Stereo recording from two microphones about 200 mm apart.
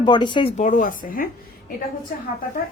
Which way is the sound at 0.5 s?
35° left (ahead or behind).